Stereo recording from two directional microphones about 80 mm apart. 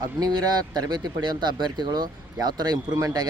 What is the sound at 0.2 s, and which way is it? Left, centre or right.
Speech, right.